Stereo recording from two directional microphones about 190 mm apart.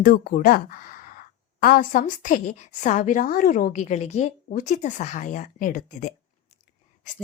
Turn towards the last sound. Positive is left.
turn(degrees=45)  # may be behind; listen again after turning